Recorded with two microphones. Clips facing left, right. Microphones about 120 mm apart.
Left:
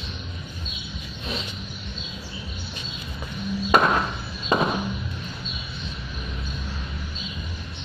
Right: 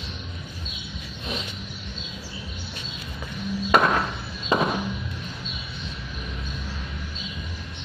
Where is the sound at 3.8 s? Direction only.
20° left (ahead or behind).